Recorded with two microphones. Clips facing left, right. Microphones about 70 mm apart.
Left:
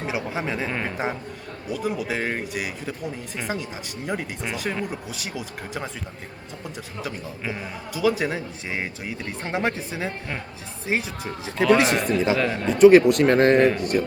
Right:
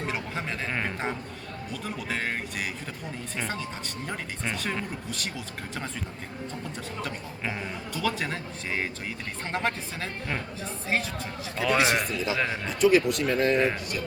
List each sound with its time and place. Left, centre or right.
0.1 s a sound: centre
0.7 s a man's voice: centre
7.0 s a man's voice: centre
11.8 s a man's voice: centre
12.1 s a man's voice: left